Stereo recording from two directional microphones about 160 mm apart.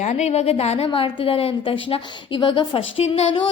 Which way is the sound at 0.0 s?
45° left (ahead or behind).